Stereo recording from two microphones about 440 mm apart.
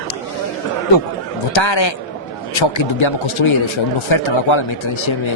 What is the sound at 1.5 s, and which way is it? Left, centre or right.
Speech, left.